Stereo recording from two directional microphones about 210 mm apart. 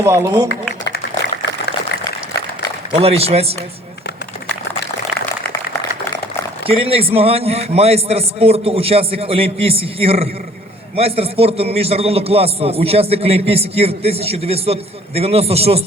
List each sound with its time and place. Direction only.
0.0 s speech: 15° right (ahead or behind)
0.9 s a sound: 50° left (ahead or behind)
2.9 s a man's voice: 30° right (ahead or behind)
6.7 s a man's voice: 25° right (ahead or behind)